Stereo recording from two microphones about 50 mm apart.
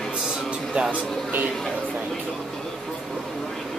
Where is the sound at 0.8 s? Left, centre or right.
Right.